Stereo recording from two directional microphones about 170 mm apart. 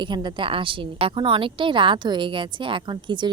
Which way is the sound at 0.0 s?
25° right (ahead or behind).